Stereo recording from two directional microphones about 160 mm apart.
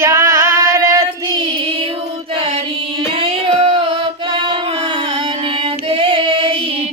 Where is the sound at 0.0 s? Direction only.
15° right (ahead or behind).